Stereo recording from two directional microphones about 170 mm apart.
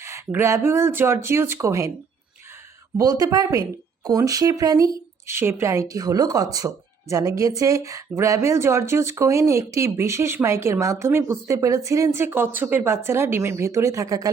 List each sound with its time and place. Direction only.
0.0 s a woman's voice: 15° right (ahead or behind)
3.0 s a woman's voice: 20° right (ahead or behind)